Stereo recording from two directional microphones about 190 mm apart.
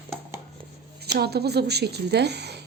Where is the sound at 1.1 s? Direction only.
60° right (ahead or behind).